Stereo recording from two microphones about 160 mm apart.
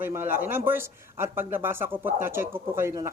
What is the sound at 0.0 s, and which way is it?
Speech, 15° right (ahead or behind).